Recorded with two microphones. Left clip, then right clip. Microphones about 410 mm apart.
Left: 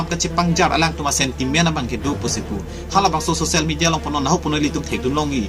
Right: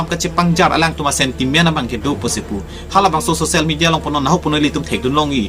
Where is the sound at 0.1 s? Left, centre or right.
Left.